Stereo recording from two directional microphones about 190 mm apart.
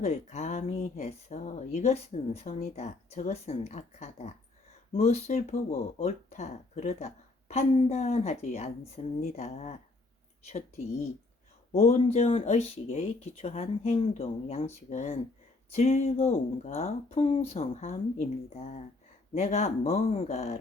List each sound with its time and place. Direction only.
0.0 s speech: 35° left (ahead or behind)
11.8 s speech: 35° left (ahead or behind)